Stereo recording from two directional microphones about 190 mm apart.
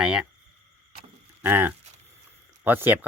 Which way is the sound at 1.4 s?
10° right (ahead or behind).